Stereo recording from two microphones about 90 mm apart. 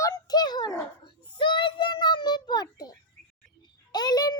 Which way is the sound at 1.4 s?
65° left (ahead or behind).